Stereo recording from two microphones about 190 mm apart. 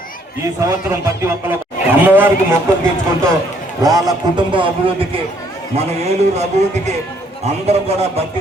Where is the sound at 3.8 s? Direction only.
20° right (ahead or behind).